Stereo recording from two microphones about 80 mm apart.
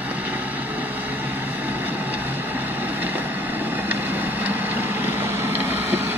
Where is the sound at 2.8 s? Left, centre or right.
Right.